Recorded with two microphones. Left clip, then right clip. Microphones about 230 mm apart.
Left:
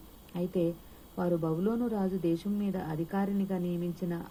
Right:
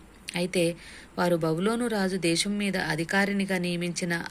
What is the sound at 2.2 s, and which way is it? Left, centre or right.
Speech, centre.